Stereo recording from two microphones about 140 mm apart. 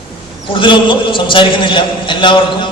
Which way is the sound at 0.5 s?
35° left (ahead or behind).